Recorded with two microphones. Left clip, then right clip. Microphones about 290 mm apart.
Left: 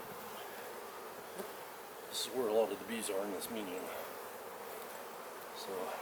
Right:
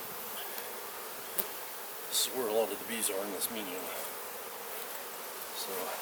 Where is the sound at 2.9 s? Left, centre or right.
Centre.